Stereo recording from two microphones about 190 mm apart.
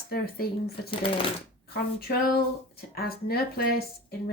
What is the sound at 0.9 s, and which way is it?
Speech, 30° left (ahead or behind).